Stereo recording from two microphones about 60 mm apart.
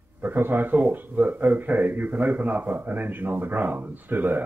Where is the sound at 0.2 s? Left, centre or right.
Right.